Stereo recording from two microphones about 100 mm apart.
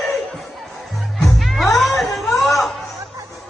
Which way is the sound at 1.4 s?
Centre (ahead or behind).